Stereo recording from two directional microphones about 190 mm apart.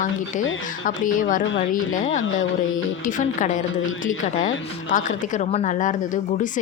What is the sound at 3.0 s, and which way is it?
A woman's voice, 40° left (ahead or behind).